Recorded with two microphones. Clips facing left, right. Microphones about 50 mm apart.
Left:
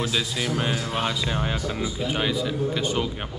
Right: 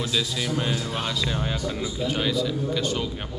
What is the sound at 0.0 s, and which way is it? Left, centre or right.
Speech, left.